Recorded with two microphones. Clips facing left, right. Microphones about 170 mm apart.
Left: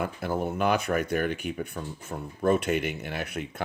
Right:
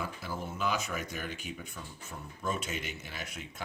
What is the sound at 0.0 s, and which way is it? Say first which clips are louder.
Speech: left 9 dB; 55° left (ahead or behind).